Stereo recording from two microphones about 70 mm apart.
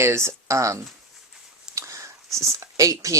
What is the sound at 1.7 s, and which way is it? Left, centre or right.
Whispering, right.